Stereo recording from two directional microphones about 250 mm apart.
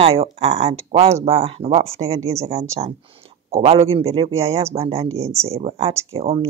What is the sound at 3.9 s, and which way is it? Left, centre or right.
Speech, right.